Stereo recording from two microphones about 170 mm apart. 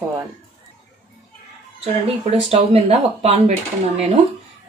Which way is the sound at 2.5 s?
35° right (ahead or behind).